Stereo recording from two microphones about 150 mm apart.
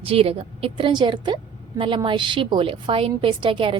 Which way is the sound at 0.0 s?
40° right (ahead or behind).